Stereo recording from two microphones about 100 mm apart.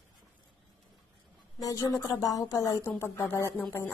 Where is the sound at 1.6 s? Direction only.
35° left (ahead or behind).